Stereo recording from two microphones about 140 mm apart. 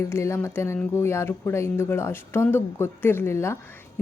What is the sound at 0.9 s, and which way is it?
A woman's voice, 20° left (ahead or behind).